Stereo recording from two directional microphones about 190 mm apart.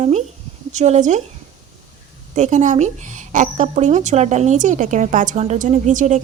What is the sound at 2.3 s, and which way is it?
Speech, 40° right (ahead or behind).